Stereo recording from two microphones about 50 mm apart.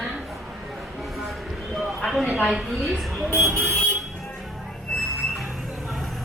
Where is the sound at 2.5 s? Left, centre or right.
Centre.